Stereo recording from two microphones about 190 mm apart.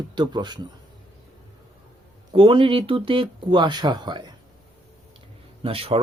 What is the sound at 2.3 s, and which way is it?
Speech, 25° right (ahead or behind).